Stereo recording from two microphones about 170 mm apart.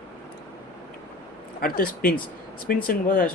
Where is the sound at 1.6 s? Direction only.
60° left (ahead or behind).